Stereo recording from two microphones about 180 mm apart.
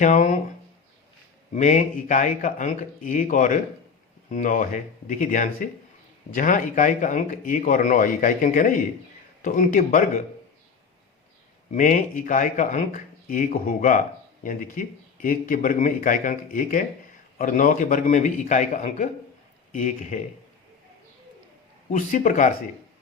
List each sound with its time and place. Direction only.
0.0 s a man's voice: 45° left (ahead or behind)
1.5 s a man's voice: 45° left (ahead or behind)
11.7 s a man's voice: 45° left (ahead or behind)
21.8 s a man's voice: 45° left (ahead or behind)